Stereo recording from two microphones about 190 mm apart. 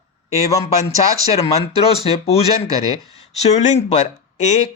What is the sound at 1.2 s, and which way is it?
Speech, 35° left (ahead or behind).